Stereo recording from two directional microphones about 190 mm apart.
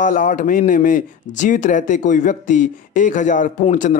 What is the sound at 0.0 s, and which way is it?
Speech, 45° left (ahead or behind).